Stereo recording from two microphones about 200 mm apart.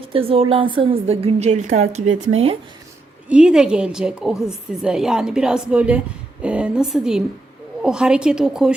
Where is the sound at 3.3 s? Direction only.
5° right (ahead or behind).